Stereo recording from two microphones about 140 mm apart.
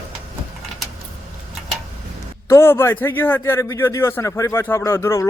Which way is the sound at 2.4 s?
20° left (ahead or behind).